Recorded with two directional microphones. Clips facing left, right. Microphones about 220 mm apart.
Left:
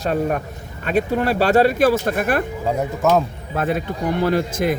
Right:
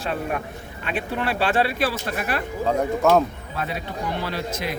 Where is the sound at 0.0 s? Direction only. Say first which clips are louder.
Left 6 dB; 45° left (ahead or behind).